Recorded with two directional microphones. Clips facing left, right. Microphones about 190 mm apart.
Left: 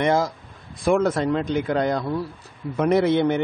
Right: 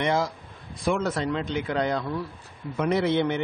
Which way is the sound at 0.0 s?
45° left (ahead or behind).